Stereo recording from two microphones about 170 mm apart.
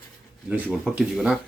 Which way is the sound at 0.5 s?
10° right (ahead or behind).